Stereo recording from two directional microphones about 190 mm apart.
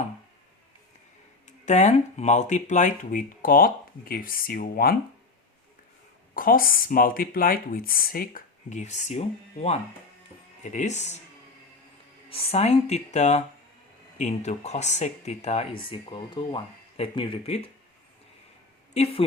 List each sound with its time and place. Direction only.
1.5 s speech: 40° left (ahead or behind); by 4.9 s 55° left (ahead or behind)
6.3 s speech: 50° left (ahead or behind)
12.3 s speech: 30° left (ahead or behind)
18.9 s speech: 30° left (ahead or behind)